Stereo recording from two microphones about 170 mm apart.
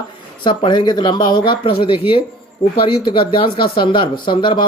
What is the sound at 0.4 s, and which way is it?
Speech, 30° left (ahead or behind).